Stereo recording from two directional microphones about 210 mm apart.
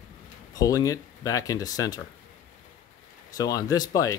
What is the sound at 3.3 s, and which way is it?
Speech, 15° left (ahead or behind).